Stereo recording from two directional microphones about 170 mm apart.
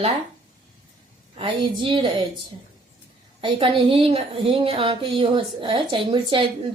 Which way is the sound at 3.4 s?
30° right (ahead or behind).